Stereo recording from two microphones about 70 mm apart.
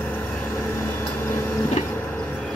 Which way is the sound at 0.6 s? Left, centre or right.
Left.